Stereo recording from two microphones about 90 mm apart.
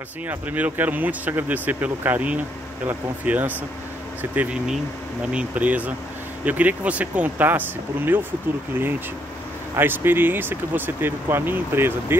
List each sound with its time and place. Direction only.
0.3 s speech: 20° right (ahead or behind)
5.3 s speech: 15° right (ahead or behind)
9.8 s speech: 25° right (ahead or behind)